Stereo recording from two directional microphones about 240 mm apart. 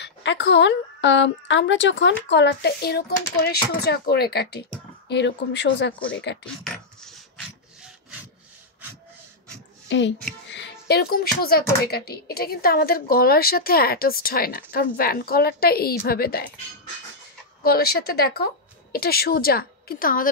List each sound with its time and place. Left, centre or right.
0.0 s a woman's voice: left
6.4 s rub: centre
9.8 s a child's voice: left
17.6 s speech: left